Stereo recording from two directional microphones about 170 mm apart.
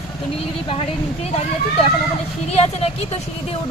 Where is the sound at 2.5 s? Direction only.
35° left (ahead or behind).